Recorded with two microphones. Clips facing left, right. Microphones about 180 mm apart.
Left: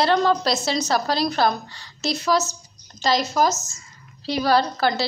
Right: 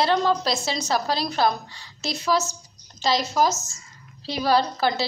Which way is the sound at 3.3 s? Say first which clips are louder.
Left 1 dB; 10° right (ahead or behind).